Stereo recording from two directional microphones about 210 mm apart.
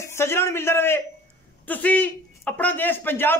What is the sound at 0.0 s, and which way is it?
A man's voice, 10° left (ahead or behind).